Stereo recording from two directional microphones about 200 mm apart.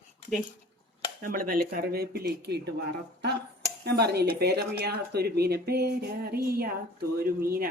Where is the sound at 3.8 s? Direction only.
55° right (ahead or behind).